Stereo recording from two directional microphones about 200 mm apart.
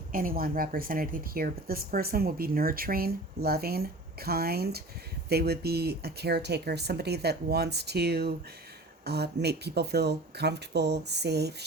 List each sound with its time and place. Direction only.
0.1 s speech: 45° right (ahead or behind)